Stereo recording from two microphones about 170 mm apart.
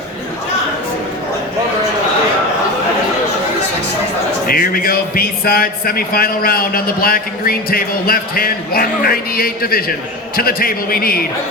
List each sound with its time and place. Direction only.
4.4 s a man's voice: 60° left (ahead or behind)